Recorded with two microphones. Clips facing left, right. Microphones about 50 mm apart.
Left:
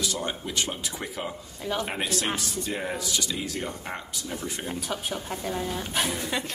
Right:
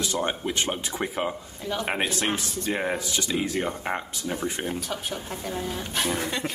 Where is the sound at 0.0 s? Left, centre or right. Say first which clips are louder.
Right 3 dB; right.